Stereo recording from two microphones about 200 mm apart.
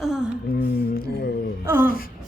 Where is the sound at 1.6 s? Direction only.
10° right (ahead or behind).